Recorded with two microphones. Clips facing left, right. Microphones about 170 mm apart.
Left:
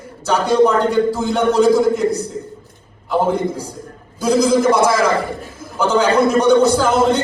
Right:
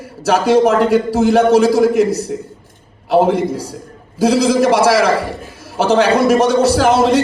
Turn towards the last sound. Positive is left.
turn(degrees=-80)